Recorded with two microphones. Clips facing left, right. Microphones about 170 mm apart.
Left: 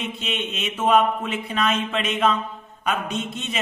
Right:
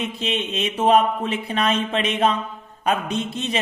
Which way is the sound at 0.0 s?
35° right (ahead or behind).